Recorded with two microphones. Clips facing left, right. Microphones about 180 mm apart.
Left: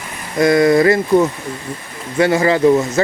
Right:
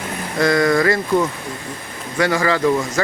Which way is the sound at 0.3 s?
20° left (ahead or behind).